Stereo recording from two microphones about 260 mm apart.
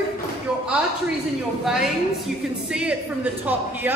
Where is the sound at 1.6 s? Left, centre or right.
Centre.